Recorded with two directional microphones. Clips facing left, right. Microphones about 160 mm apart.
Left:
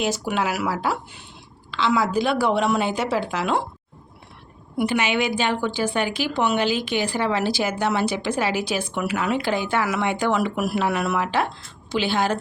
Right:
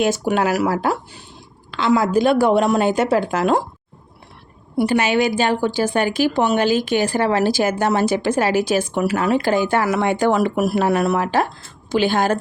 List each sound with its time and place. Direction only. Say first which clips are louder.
0.0 s a woman's voice: right 6 dB; 50° right (ahead or behind)
4.8 s a woman's voice: right 5 dB; 40° right (ahead or behind)